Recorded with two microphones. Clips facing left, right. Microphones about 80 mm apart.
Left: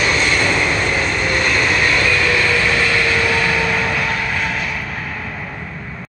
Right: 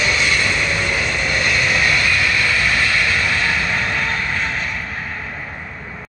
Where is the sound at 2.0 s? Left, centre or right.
Left.